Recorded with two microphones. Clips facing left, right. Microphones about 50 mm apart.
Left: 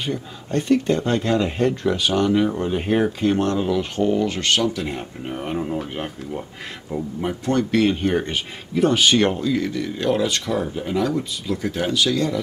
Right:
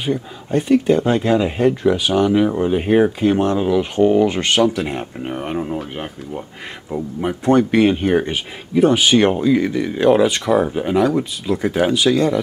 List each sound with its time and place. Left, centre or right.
0.0 s speech: centre
10.6 s speech: right